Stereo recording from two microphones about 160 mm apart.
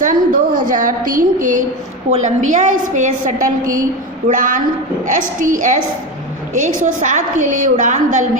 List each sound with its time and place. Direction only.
0.0 s a woman's voice: 55° right (ahead or behind)